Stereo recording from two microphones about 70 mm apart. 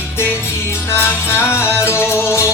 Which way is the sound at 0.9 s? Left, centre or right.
Left.